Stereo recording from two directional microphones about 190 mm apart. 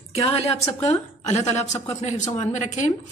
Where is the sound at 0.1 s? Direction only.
30° left (ahead or behind).